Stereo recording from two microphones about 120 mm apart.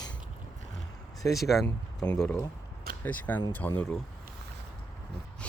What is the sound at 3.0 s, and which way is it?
Speech, 15° left (ahead or behind).